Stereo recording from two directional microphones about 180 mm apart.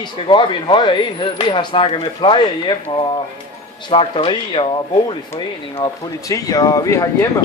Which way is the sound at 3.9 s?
30° left (ahead or behind).